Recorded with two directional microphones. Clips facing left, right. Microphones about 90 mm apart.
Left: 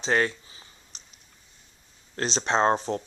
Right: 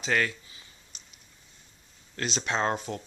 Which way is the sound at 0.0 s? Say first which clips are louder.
Left 3 dB; 30° left (ahead or behind).